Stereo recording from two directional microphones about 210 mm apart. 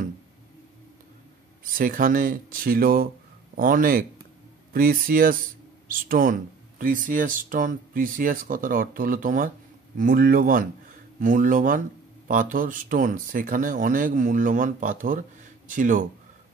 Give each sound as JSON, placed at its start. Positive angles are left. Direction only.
{"t": 1.6, "sound": "speech", "side_deg": -40}